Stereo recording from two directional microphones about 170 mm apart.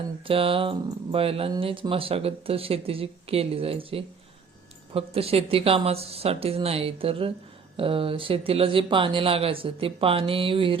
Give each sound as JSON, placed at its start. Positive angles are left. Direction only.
{"t": 0.3, "sound": "speech", "side_deg": -30}